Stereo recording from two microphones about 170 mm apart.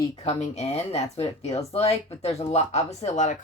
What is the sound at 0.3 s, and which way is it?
A woman's voice, 40° left (ahead or behind).